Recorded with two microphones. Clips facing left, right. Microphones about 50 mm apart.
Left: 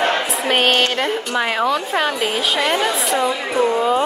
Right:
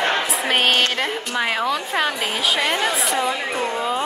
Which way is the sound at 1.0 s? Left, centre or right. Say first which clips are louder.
Left 3 dB; centre.